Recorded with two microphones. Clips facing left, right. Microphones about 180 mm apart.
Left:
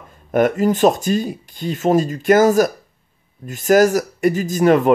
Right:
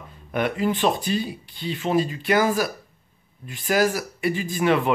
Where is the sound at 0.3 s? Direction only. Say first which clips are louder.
Left 8 dB; 45° left (ahead or behind).